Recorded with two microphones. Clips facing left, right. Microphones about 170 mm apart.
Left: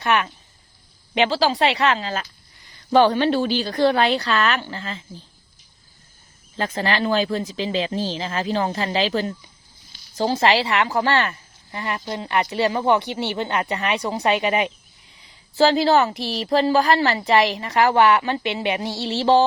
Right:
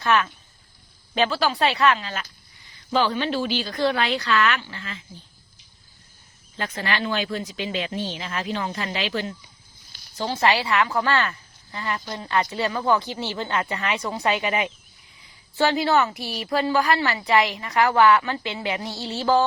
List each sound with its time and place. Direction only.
1.2 s speech: 30° left (ahead or behind)
6.6 s speech: 35° left (ahead or behind)